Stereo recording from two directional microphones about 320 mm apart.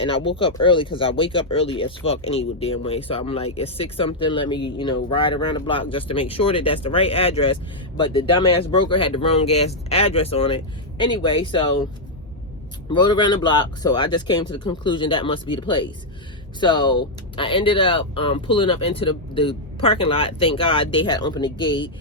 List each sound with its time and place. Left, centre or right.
0.0 s speech: centre
12.9 s speech: centre